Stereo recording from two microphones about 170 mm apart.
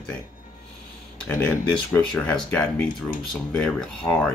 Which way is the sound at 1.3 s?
10° left (ahead or behind).